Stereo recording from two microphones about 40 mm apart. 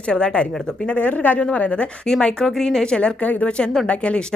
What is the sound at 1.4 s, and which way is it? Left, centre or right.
Speech, left.